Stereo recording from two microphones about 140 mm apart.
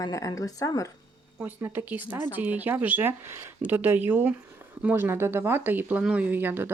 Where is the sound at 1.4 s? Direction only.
15° right (ahead or behind).